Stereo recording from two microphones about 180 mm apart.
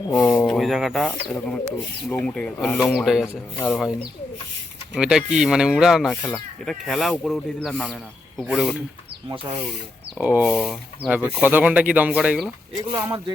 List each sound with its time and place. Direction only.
0.1 s speech: 5° left (ahead or behind)
4.9 s speech: 5° right (ahead or behind)
10.2 s speech: 10° right (ahead or behind)
12.9 s speech: 25° right (ahead or behind)